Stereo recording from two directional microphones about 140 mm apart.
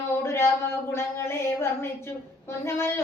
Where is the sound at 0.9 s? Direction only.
20° left (ahead or behind).